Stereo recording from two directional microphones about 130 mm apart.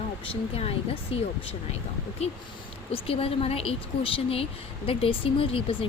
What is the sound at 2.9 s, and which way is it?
Speech, 50° left (ahead or behind).